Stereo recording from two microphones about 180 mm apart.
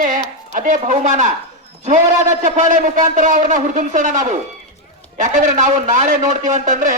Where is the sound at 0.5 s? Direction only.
45° right (ahead or behind).